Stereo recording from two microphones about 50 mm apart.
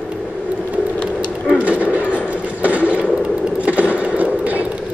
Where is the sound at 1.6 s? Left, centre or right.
Right.